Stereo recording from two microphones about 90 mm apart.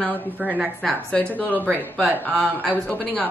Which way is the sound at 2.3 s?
20° right (ahead or behind).